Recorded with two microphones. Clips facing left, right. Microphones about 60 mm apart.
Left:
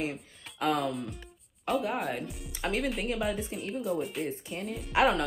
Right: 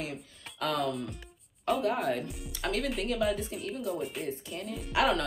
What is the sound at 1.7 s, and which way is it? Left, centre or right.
Speech, centre.